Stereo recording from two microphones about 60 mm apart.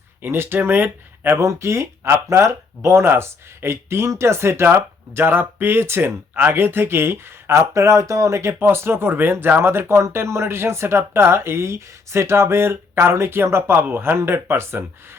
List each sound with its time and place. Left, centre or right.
0.2 s speech: right
1.4 s speech: right
7.6 s speech: right